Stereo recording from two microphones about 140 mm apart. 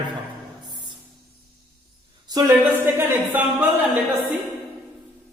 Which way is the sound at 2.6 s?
15° right (ahead or behind).